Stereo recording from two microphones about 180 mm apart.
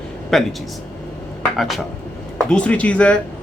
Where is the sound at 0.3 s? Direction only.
Centre (ahead or behind).